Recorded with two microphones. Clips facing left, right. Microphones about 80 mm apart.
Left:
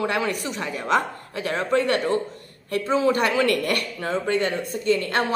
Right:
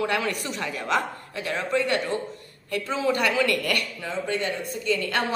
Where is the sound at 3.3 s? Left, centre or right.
Left.